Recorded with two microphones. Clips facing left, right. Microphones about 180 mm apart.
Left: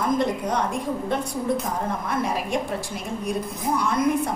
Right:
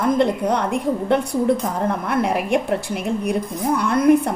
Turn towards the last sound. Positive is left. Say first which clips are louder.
# right 7 dB
turn(degrees=-60)  # may be behind; listen again after turning